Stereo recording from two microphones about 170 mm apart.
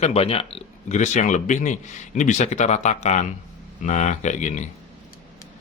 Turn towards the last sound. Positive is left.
turn(degrees=45)  # may be behind; listen again after turning